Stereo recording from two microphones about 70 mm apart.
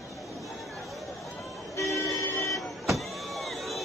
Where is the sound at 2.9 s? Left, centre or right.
Centre.